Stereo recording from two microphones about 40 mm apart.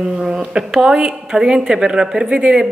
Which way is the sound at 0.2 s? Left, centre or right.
Centre.